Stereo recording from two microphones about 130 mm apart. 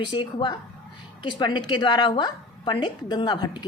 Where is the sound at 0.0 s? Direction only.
35° left (ahead or behind).